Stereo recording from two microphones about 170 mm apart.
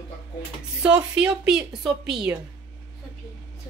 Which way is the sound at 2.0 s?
70° right (ahead or behind).